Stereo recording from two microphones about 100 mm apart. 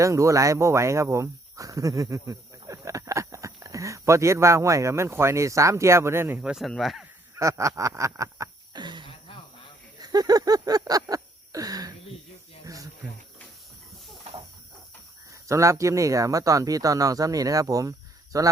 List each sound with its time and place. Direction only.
0.0 s speech: 30° right (ahead or behind)
6.4 s speech: 10° right (ahead or behind)
7.3 s speech: 30° right (ahead or behind)
8.7 s a sound: 50° right (ahead or behind)
9.0 s a sound: 65° left (ahead or behind)
10.0 s speech: 40° right (ahead or behind)
11.1 s a sound: 35° right (ahead or behind)
12.6 s snake: 35° right (ahead or behind)
15.4 s speech: 30° right (ahead or behind)